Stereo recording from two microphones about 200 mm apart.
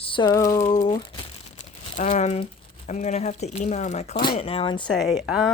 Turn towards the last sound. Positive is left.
turn(degrees=-5)  # may be behind; listen again after turning